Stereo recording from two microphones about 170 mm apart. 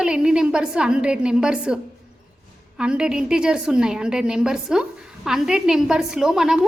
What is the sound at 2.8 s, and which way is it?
A woman's voice, 5° right (ahead or behind).